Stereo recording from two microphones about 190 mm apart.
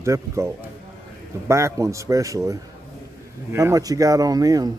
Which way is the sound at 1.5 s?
15° right (ahead or behind).